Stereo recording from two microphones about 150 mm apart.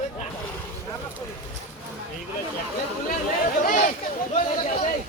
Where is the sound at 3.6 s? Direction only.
60° left (ahead or behind).